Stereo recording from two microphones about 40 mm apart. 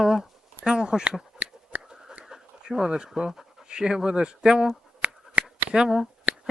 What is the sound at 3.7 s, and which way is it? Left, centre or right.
Speech, centre.